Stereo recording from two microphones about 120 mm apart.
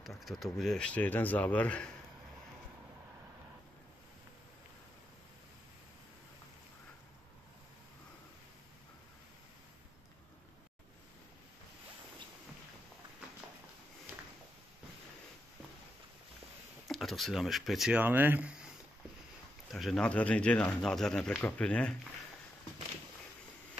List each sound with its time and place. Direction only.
0.0 s a sound: centre (ahead or behind)
0.6 s speech: 5° left (ahead or behind)
16.8 s speech: centre (ahead or behind)
17.9 s speech: 15° right (ahead or behind)
19.7 s speech: centre (ahead or behind)